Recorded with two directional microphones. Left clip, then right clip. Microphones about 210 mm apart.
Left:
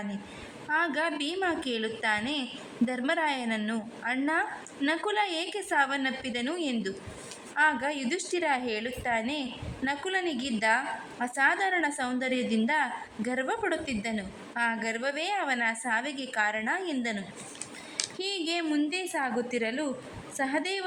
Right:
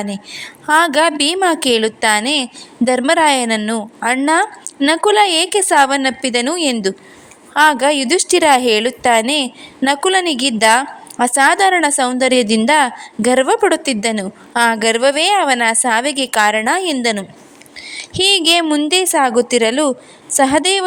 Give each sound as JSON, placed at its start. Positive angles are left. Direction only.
{"t": 0.7, "sound": "a woman's voice", "side_deg": -40}